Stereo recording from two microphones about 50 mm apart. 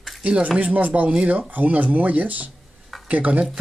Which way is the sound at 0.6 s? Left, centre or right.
Right.